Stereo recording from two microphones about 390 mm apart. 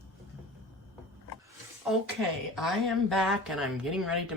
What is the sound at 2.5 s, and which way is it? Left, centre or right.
Speech, centre.